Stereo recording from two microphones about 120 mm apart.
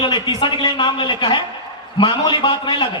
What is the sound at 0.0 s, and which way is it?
A man's voice, 40° left (ahead or behind).